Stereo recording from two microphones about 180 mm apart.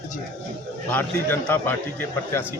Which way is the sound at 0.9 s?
10° left (ahead or behind).